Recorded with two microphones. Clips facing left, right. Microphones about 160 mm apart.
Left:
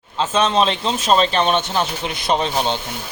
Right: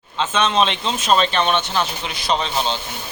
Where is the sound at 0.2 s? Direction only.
35° left (ahead or behind).